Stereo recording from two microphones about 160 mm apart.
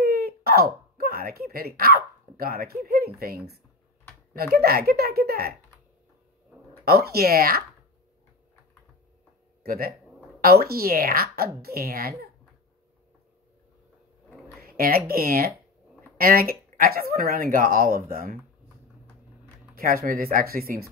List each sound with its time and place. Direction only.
0.0 s wail: 75° right (ahead or behind)
3.2 s speech: 70° right (ahead or behind)
4.6 s speech: 70° right (ahead or behind)
6.8 s speech: 75° right (ahead or behind)
9.6 s speech: 70° right (ahead or behind)
14.8 s speech: 70° right (ahead or behind)
19.7 s speech: 65° right (ahead or behind)